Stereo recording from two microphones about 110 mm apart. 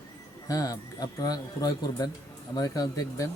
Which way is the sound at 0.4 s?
35° left (ahead or behind).